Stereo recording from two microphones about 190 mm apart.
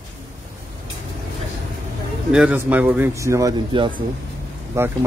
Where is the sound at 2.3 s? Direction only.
5° right (ahead or behind).